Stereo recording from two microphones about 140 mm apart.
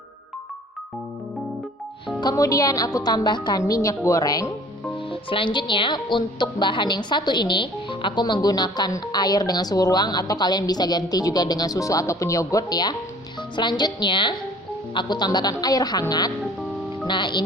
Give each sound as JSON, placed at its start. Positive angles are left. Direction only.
{"t": 2.2, "sound": "a woman's voice", "side_deg": 25}
{"t": 5.1, "sound": "a woman's voice", "side_deg": 40}